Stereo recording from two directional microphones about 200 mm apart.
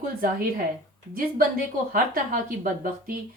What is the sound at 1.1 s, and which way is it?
Speech, 45° right (ahead or behind).